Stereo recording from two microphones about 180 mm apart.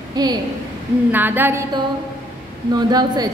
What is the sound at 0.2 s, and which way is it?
Speech, 20° right (ahead or behind).